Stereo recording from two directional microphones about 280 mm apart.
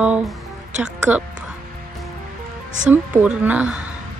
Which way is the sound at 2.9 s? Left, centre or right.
Centre.